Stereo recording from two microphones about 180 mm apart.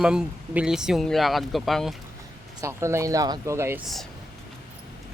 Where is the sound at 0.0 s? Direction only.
5° right (ahead or behind).